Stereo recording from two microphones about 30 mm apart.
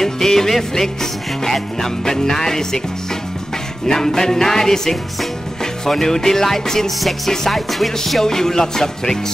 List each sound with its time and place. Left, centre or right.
0.0 s music: centre
3.8 s music: centre